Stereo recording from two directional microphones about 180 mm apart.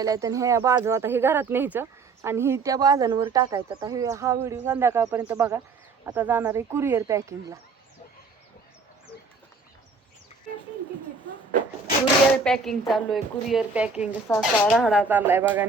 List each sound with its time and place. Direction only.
0.0 s speech: 20° right (ahead or behind)
12.3 s a woman's voice: 5° left (ahead or behind)
14.3 s speech: 10° left (ahead or behind)
14.7 s speech: 5° right (ahead or behind)